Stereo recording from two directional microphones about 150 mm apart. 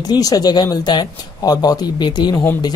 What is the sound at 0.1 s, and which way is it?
Speech, 25° left (ahead or behind).